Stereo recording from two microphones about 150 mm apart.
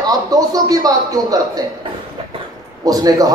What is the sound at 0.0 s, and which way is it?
Speech, 25° right (ahead or behind).